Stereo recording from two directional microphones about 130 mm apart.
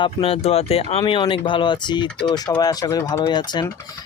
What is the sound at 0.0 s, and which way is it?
Speech, 45° left (ahead or behind).